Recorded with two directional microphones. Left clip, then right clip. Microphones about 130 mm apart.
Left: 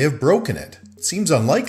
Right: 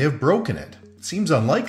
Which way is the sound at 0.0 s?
30° left (ahead or behind).